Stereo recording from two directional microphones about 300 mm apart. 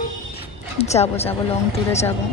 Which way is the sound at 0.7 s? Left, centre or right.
Left.